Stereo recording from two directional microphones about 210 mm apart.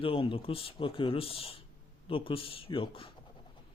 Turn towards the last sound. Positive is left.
turn(degrees=25)  # may be behind; listen again after turning